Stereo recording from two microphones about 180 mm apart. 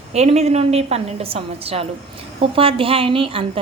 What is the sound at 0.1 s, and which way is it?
A woman's voice, 35° right (ahead or behind).